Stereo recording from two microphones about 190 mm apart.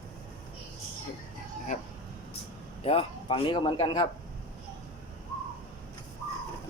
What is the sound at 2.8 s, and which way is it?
Speech, 30° left (ahead or behind).